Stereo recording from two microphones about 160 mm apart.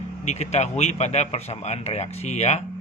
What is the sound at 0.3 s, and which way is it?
Speech, 45° left (ahead or behind).